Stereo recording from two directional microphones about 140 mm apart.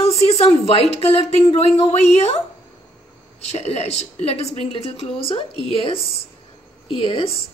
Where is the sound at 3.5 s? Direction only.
50° left (ahead or behind).